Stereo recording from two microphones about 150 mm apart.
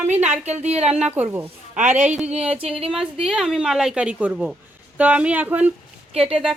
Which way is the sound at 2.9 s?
5° right (ahead or behind).